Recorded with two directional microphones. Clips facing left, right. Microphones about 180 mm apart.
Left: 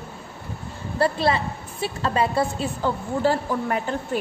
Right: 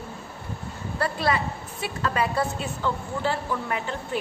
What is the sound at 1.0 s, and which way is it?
A woman's voice, 30° left (ahead or behind).